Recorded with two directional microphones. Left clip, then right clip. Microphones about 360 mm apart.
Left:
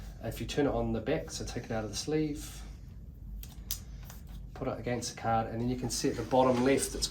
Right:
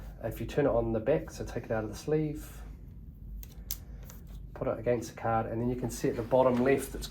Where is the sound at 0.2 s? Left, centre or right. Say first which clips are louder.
Right 2 dB; centre.